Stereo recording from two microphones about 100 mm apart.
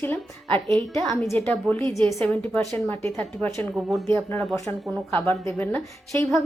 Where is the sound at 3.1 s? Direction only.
15° left (ahead or behind).